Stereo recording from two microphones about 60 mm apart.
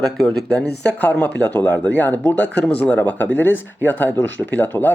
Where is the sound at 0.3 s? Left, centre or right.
Centre.